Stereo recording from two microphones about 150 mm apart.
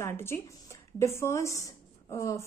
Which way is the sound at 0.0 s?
15° left (ahead or behind).